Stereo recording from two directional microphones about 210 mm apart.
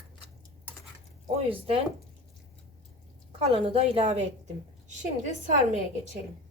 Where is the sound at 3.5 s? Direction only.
25° right (ahead or behind).